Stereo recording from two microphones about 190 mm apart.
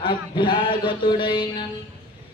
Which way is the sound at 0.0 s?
25° left (ahead or behind).